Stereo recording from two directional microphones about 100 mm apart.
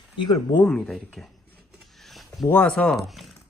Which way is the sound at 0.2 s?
50° left (ahead or behind).